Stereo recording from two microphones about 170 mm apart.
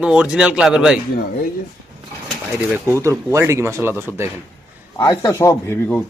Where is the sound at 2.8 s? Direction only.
15° right (ahead or behind).